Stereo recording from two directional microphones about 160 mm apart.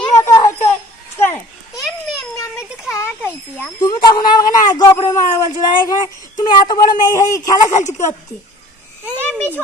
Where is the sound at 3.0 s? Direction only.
15° left (ahead or behind).